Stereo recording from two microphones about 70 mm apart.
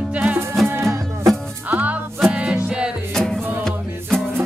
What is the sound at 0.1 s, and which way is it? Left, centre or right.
Music, centre.